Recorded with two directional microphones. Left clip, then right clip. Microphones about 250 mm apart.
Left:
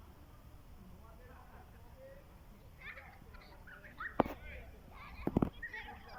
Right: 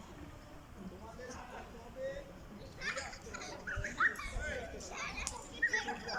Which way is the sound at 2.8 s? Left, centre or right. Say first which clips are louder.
Right 10 dB; right.